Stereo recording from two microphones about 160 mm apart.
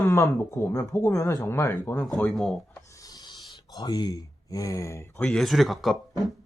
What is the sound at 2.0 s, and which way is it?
Speech, centre (ahead or behind).